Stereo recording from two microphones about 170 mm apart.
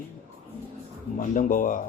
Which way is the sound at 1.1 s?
50° left (ahead or behind).